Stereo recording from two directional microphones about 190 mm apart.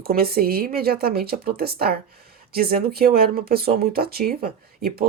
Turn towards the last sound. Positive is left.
turn(degrees=-50)  # may be behind; listen again after turning